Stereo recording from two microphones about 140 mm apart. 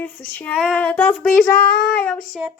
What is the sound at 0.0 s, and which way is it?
Speech, 15° left (ahead or behind).